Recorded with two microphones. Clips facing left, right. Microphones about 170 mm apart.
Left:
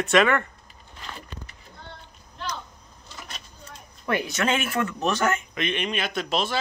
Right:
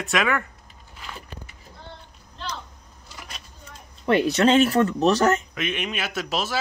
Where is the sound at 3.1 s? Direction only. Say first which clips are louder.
Even; 10° right (ahead or behind).